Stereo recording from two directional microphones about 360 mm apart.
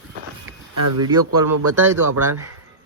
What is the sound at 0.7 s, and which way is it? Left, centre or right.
Speech, right.